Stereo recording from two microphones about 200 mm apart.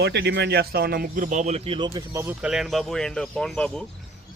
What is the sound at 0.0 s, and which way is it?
Speech, 60° right (ahead or behind).